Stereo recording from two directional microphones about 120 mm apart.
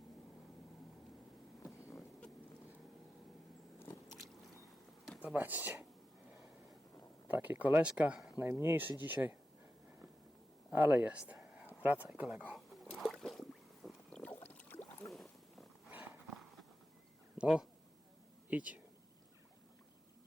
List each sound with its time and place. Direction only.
1.6 s insect: 25° left (ahead or behind)
3.8 s a sound: 20° left (ahead or behind)
5.2 s speech: 15° right (ahead or behind)
6.3 s a sound: centre (ahead or behind)
7.3 s speech: 15° right (ahead or behind)
8.4 s speech: 20° right (ahead or behind)
10.7 s speech: 15° right (ahead or behind)
12.5 s splash: centre (ahead or behind)
13.8 s boat: 10° left (ahead or behind)
15.0 s boat: centre (ahead or behind)
16.3 s a sound: centre (ahead or behind)
17.3 s speech: 5° right (ahead or behind)